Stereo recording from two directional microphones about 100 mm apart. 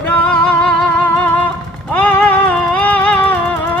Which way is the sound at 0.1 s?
10° left (ahead or behind).